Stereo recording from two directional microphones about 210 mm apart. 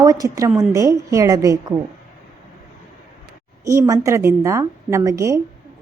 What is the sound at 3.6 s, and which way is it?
A woman's voice, 15° right (ahead or behind).